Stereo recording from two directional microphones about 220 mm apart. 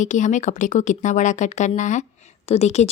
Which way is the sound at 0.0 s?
35° left (ahead or behind).